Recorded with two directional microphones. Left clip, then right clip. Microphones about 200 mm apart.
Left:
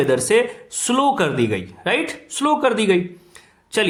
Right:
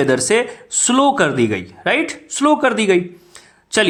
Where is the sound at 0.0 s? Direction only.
25° right (ahead or behind).